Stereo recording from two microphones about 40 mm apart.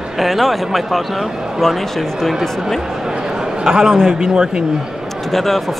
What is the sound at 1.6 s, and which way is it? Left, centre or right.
Speech, centre.